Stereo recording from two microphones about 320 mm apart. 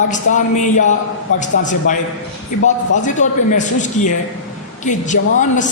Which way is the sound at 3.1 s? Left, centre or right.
Left.